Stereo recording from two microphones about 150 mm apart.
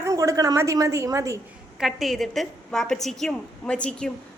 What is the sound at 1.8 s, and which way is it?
A woman's voice, centre (ahead or behind).